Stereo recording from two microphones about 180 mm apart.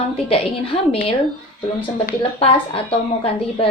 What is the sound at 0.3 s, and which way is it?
Speech, 30° left (ahead or behind).